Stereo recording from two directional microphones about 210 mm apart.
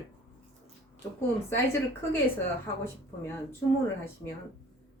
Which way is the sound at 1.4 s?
10° left (ahead or behind).